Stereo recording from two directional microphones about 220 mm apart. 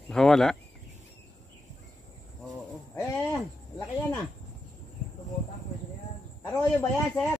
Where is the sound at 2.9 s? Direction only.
15° left (ahead or behind).